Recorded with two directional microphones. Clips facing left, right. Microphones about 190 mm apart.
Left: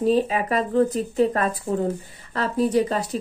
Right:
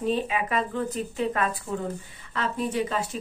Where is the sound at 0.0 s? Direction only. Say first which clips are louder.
Left 6 dB; 35° left (ahead or behind).